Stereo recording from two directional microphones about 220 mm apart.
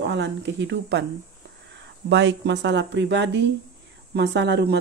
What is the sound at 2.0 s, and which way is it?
Speech, 55° right (ahead or behind).